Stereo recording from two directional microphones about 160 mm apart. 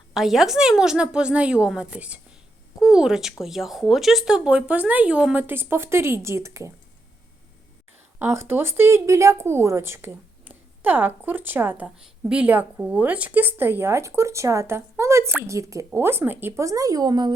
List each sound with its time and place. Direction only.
0.1 s a woman's voice: centre (ahead or behind); by 6.7 s 15° right (ahead or behind)
8.2 s speech: 15° right (ahead or behind)